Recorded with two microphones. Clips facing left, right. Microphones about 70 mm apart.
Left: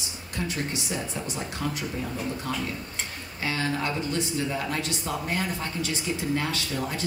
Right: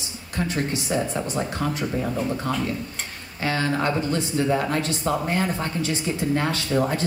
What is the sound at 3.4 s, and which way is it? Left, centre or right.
Speech, right.